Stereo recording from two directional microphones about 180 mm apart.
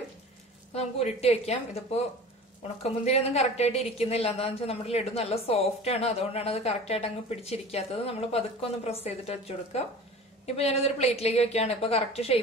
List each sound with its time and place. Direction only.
0.7 s a woman's voice: 35° left (ahead or behind)